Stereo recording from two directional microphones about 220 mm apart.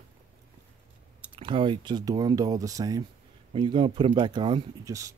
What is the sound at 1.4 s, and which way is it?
Speech, 20° right (ahead or behind).